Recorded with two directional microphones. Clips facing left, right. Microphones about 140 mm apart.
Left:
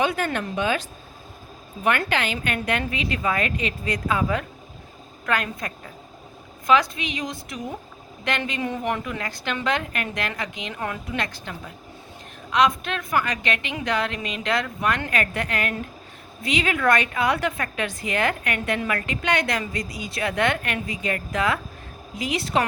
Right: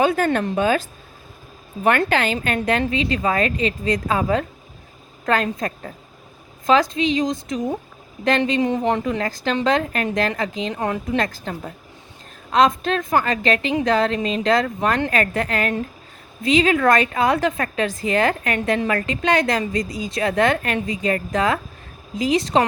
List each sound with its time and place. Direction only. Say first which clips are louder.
0.0 s a woman's voice: right 6 dB; 35° right (ahead or behind)
1.8 s a woman's voice: right 5 dB; 35° right (ahead or behind)
6.9 s a woman's voice: right 10 dB; 25° right (ahead or behind)
16.8 s a woman's voice: right 4 dB; 40° right (ahead or behind)